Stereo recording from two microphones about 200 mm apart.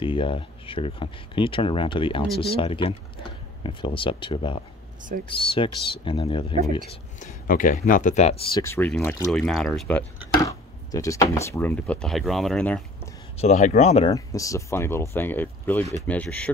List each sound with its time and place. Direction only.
0.0 s speech: 25° left (ahead or behind)
7.2 s speech: 40° left (ahead or behind)
8.5 s speech: 10° left (ahead or behind)
10.4 s speech: 15° left (ahead or behind)
13.4 s speech: 40° left (ahead or behind)
14.1 s speech: 15° left (ahead or behind)